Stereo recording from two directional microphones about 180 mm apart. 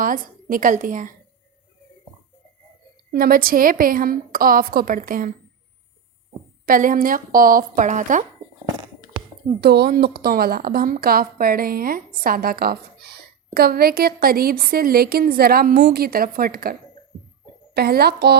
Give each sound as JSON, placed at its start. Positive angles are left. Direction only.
{"t": 0.0, "sound": "a woman's voice", "side_deg": -50}
{"t": 3.1, "sound": "a woman's voice", "side_deg": -55}
{"t": 6.7, "sound": "a woman's voice", "side_deg": -50}
{"t": 9.6, "sound": "a woman's voice", "side_deg": -60}
{"t": 17.7, "sound": "a woman's voice", "side_deg": -60}